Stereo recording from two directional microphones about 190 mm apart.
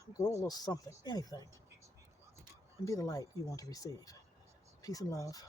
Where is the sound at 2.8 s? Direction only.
15° left (ahead or behind).